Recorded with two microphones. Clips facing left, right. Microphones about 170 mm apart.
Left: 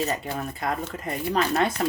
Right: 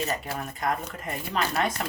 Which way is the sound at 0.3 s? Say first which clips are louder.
Left 1 dB; 30° left (ahead or behind).